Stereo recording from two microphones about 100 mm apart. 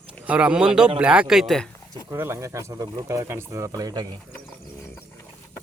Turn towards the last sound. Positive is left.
turn(degrees=-40)  # may be behind; listen again after turning